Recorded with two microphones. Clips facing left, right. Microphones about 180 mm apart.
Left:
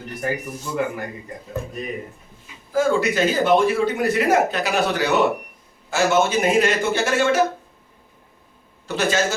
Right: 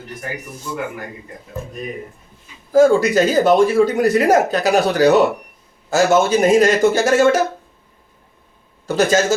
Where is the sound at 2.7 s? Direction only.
40° right (ahead or behind).